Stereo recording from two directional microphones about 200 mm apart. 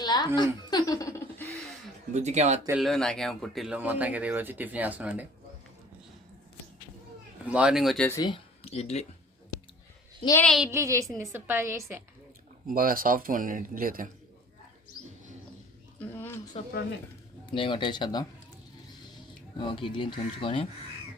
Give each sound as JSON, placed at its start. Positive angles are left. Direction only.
{"t": 0.0, "sound": "chuckle", "side_deg": 20}
{"t": 2.1, "sound": "speech", "side_deg": -35}
{"t": 2.6, "sound": "speech", "side_deg": 0}
{"t": 7.4, "sound": "speech", "side_deg": -5}
{"t": 8.1, "sound": "speech", "side_deg": 20}
{"t": 10.4, "sound": "speech", "side_deg": 0}
{"t": 10.7, "sound": "speech", "side_deg": -15}
{"t": 12.6, "sound": "speech", "side_deg": -45}
{"t": 16.0, "sound": "a sound", "side_deg": 10}
{"t": 17.5, "sound": "speech", "side_deg": 25}
{"t": 19.5, "sound": "speech", "side_deg": 25}